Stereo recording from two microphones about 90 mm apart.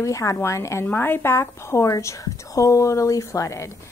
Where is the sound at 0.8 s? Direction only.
25° left (ahead or behind).